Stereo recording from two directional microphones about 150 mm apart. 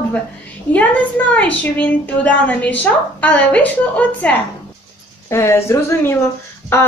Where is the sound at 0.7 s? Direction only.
10° left (ahead or behind).